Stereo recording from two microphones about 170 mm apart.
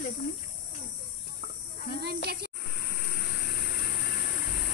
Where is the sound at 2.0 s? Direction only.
70° right (ahead or behind).